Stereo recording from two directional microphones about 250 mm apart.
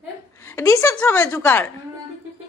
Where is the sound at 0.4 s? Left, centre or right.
Centre.